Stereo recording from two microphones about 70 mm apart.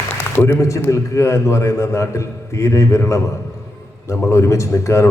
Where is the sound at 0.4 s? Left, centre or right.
Left.